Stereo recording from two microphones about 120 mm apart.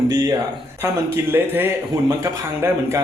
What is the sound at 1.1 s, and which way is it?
Speech, 15° right (ahead or behind).